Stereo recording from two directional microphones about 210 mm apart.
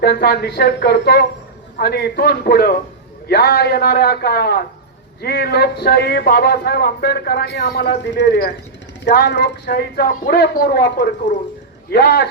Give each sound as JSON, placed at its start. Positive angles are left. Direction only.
{"t": 0.0, "sound": "speech", "side_deg": 50}